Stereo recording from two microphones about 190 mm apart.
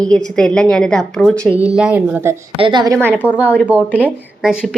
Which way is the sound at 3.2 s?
10° right (ahead or behind).